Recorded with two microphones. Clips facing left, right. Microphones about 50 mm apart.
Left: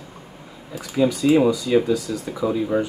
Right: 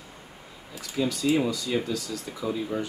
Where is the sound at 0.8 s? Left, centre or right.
Centre.